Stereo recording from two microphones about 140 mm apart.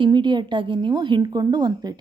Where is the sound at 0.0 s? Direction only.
35° right (ahead or behind).